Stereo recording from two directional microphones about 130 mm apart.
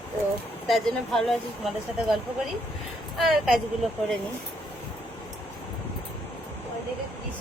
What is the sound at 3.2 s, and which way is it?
Speech, 5° right (ahead or behind).